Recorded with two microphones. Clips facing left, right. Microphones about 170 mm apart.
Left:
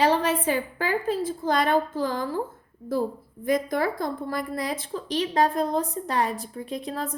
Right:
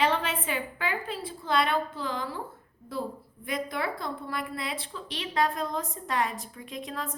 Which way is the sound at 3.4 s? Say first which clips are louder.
Left 8 dB; 45° left (ahead or behind).